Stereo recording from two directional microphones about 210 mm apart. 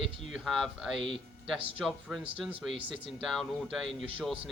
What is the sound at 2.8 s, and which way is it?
Speech, 25° right (ahead or behind).